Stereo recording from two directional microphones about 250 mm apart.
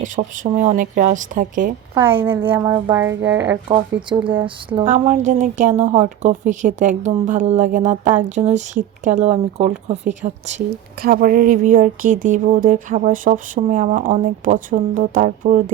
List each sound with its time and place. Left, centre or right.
0.0 s speech: right
2.0 s speech: centre
4.4 s speech: right
4.9 s speech: right